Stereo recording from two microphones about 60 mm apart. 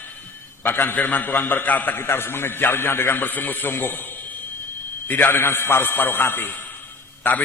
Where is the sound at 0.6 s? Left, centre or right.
Left.